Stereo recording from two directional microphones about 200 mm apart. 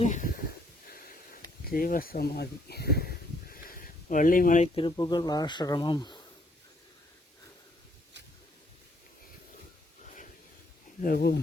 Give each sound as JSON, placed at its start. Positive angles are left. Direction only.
{"t": 0.0, "sound": "speech", "side_deg": 40}
{"t": 11.0, "sound": "speech", "side_deg": 50}